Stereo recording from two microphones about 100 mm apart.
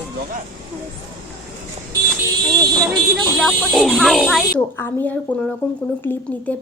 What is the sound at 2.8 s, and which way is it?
Speech, centre (ahead or behind).